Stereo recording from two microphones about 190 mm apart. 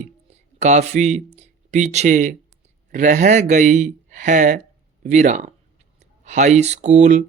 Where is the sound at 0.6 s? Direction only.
35° right (ahead or behind).